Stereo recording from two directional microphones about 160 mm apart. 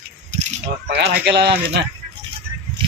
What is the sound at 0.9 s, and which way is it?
Speech, 90° right.